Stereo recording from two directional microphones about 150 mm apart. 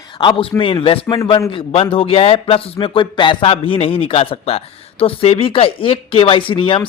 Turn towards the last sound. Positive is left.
turn(degrees=35)  # may be behind; listen again after turning